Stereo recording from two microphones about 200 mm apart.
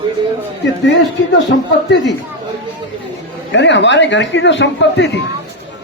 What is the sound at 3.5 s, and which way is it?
A man's voice, 60° left (ahead or behind).